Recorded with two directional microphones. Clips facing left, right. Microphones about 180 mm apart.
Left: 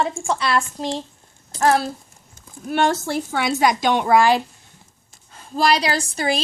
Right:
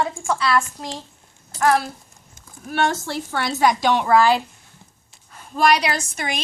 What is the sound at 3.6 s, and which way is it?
Speech, 15° left (ahead or behind).